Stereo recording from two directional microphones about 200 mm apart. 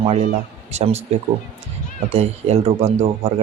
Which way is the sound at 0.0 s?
30° right (ahead or behind).